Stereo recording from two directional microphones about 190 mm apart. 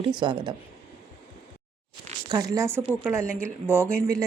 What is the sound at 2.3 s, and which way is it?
Speech, 20° right (ahead or behind).